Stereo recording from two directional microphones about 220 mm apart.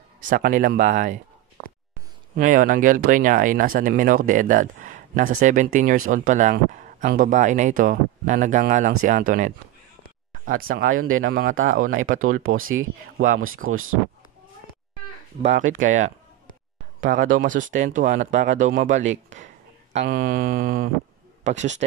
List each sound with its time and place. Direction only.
0.2 s speech: 35° right (ahead or behind)
1.6 s a sound: 30° left (ahead or behind)
2.3 s speech: 40° right (ahead or behind)
10.8 s speech: 65° right (ahead or behind)
15.4 s speech: 35° right (ahead or behind)
17.0 s speech: 40° right (ahead or behind)